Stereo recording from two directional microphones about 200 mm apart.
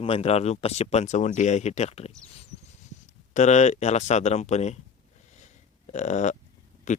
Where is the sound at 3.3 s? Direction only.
35° left (ahead or behind).